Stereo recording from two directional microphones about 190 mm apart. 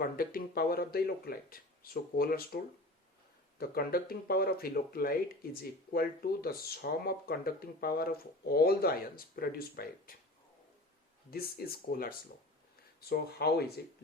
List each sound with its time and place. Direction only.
0.0 s speech: 50° left (ahead or behind)
3.6 s speech: 50° left (ahead or behind)
11.3 s speech: 55° left (ahead or behind)